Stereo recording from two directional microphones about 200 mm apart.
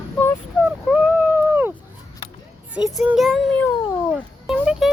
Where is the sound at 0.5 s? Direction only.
5° right (ahead or behind).